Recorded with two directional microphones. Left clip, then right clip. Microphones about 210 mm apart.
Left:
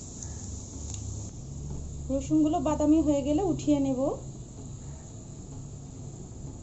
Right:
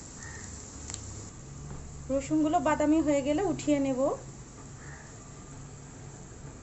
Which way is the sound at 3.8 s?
30° right (ahead or behind).